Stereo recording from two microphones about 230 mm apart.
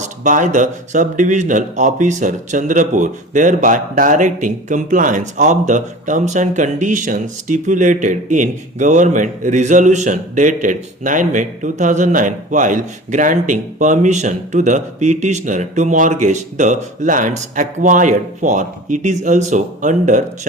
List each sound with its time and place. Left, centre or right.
0.0 s speech: right